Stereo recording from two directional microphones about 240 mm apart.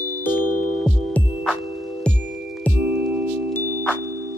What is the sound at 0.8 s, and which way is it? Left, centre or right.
Music, centre.